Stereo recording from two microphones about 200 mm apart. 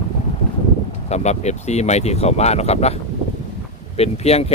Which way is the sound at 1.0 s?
35° left (ahead or behind).